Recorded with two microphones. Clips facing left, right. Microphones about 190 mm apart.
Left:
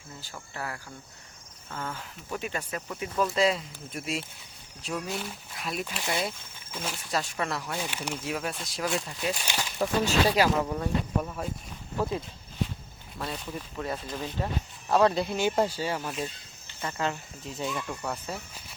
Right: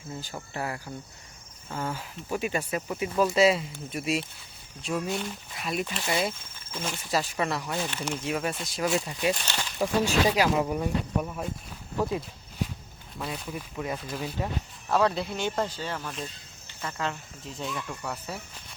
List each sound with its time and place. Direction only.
0.5 s speech: 20° right (ahead or behind); by 7.8 s centre (ahead or behind)
7.8 s speech: 10° left (ahead or behind)
9.3 s speech: 10° left (ahead or behind)
9.8 s speech: 10° right (ahead or behind)
13.1 s speech: 5° right (ahead or behind)